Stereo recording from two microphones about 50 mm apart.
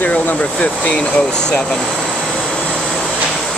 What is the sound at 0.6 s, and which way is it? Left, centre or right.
Speech, left.